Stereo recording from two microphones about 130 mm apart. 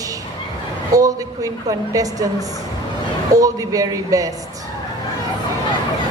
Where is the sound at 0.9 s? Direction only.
25° right (ahead or behind).